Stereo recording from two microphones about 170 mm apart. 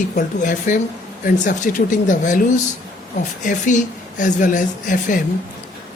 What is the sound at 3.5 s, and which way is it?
A woman's voice, 50° left (ahead or behind).